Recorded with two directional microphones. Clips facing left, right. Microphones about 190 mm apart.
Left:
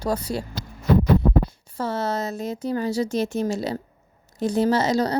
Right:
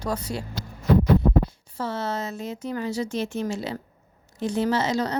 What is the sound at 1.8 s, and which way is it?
A woman's voice, 40° left (ahead or behind).